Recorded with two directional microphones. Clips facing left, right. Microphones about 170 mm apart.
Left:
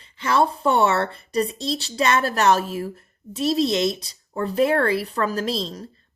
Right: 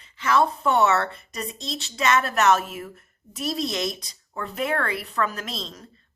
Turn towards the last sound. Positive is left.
turn(degrees=35)  # may be behind; listen again after turning